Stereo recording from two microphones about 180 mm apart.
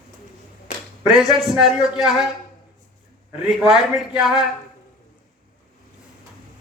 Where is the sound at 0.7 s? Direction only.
45° left (ahead or behind).